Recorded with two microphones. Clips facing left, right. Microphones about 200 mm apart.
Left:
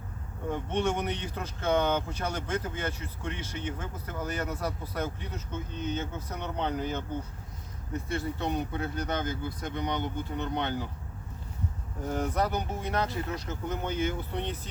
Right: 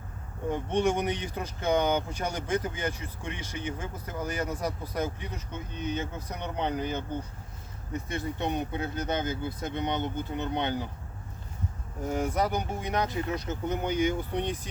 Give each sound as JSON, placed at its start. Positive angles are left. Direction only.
{"t": 0.5, "sound": "speech", "side_deg": -15}
{"t": 8.0, "sound": "speech", "side_deg": -15}
{"t": 12.0, "sound": "speech", "side_deg": -10}